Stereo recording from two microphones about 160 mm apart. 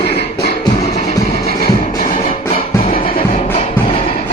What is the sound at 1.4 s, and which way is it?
Music, 65° left (ahead or behind).